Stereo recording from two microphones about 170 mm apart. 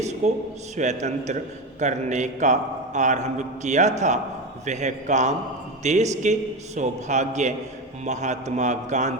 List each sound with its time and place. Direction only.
0.2 s a man's voice: 45° right (ahead or behind)